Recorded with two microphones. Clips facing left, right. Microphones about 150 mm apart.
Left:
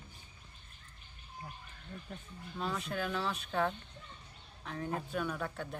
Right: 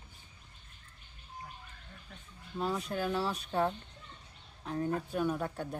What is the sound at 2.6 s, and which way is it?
Speech, 10° right (ahead or behind).